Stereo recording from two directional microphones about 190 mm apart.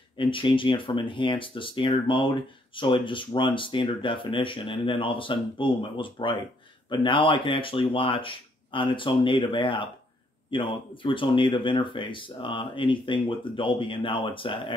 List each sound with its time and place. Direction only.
0.2 s speech: 25° left (ahead or behind)